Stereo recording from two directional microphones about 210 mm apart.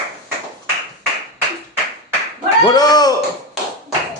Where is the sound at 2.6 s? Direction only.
20° left (ahead or behind).